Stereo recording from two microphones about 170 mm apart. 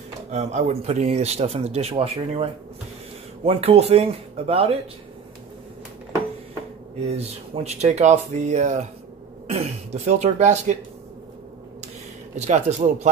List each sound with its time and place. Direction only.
0.3 s speech: 40° right (ahead or behind)
7.1 s speech: 40° right (ahead or behind)
12.4 s a man's voice: 45° right (ahead or behind)